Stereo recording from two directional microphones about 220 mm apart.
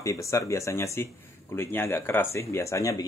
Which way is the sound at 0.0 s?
15° left (ahead or behind).